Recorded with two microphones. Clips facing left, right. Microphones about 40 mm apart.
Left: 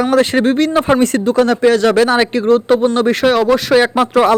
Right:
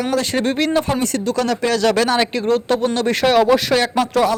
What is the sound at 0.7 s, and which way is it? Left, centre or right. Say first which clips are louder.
Speech: left 6 dB; left.